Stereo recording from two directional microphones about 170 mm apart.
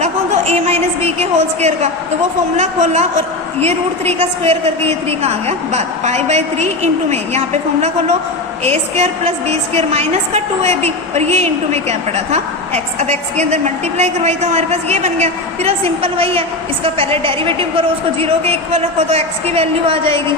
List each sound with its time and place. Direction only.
0.0 s a woman's voice: 40° right (ahead or behind)